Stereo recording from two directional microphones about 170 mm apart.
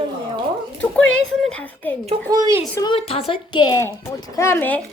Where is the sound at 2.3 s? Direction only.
25° right (ahead or behind).